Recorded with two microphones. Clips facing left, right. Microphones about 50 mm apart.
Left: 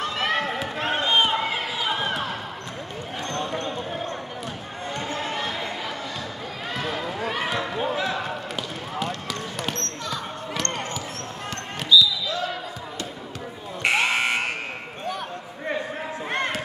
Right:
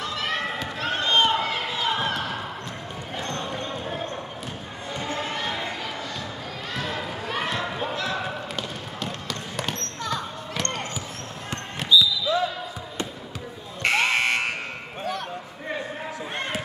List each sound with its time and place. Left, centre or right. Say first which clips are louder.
0.0 s run: left 3 dB; left
0.7 s a sound: even; left
7.2 s basketball bounce: even; centre
8.5 s basketball bounce: left 3 dB; centre
11.5 s basketball bounce: left 1 dB; right
13.8 s fire alarm: even; centre